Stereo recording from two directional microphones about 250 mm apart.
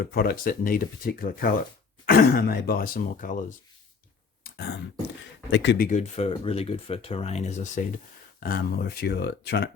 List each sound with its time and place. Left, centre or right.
0.0 s speech: left
4.4 s a sound: left
5.5 s speech: left